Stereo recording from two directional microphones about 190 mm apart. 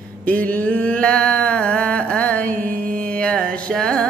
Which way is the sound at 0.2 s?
10° left (ahead or behind).